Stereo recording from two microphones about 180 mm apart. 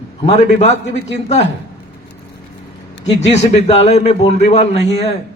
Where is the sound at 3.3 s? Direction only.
35° left (ahead or behind).